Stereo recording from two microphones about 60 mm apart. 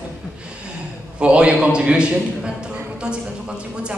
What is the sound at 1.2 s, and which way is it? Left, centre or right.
A man's voice, centre.